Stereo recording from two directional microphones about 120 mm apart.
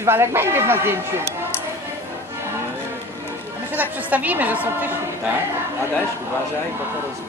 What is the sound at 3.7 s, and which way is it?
A woman's voice, 15° right (ahead or behind).